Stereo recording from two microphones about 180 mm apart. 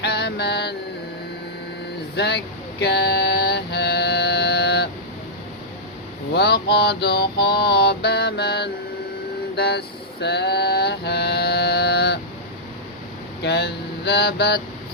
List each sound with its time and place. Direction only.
0.0 s mantra: 65° left (ahead or behind)
2.1 s speech: 70° left (ahead or behind)
2.8 s mantra: 70° left (ahead or behind)
6.3 s mantra: 65° left (ahead or behind)
9.6 s music: 65° left (ahead or behind)
13.4 s mantra: 70° left (ahead or behind)